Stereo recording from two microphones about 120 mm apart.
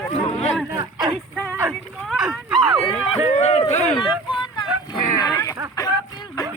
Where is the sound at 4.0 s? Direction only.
40° left (ahead or behind).